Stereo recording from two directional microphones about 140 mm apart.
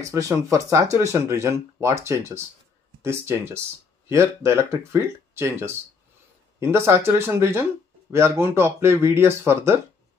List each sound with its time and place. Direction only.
0.0 s speech: 20° right (ahead or behind)